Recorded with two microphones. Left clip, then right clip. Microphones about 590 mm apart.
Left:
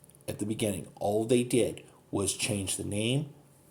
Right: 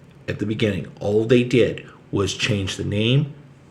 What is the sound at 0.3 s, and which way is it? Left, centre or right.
Speech, left.